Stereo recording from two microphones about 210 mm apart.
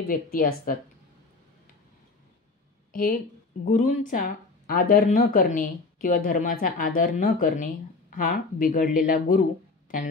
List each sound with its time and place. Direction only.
0.0 s speech: 45° left (ahead or behind)
2.9 s a sound: 45° left (ahead or behind)
3.6 s a woman's voice: 35° left (ahead or behind)